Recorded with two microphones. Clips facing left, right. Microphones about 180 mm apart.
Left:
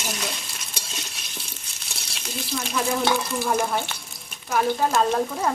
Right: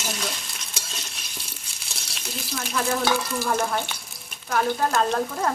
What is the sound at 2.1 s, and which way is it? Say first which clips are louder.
Speech: left 3 dB; centre (ahead or behind).